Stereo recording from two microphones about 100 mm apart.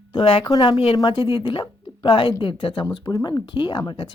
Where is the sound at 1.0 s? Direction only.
55° left (ahead or behind).